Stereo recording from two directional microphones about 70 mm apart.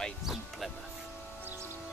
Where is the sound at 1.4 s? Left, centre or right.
Right.